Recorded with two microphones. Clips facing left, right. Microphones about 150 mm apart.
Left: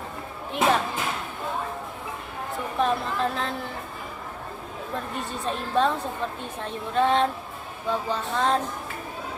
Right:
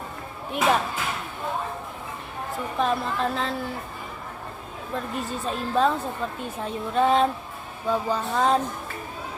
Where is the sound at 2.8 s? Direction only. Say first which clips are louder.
Even; centre (ahead or behind).